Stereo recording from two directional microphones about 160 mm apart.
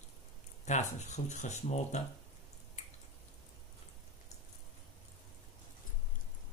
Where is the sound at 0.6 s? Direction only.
45° left (ahead or behind).